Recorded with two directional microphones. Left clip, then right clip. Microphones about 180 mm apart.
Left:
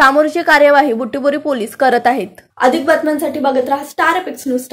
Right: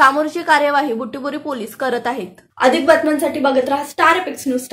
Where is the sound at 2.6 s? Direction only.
50° left (ahead or behind).